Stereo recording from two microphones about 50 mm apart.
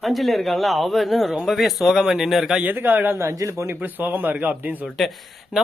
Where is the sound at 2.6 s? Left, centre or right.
Right.